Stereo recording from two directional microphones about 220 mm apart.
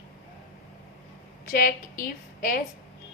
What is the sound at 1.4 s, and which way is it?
A woman's voice, 40° left (ahead or behind).